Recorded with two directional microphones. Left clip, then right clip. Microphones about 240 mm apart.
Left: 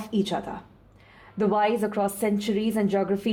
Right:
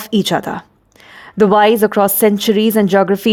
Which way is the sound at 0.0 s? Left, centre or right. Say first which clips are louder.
Right 12 dB; right.